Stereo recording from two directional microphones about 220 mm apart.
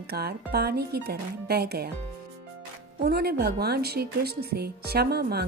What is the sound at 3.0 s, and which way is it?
Speech, 45° right (ahead or behind).